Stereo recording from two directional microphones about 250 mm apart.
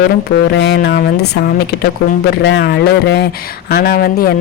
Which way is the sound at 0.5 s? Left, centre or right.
Left.